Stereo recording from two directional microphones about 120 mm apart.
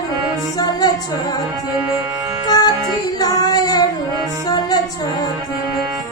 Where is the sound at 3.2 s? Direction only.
30° left (ahead or behind).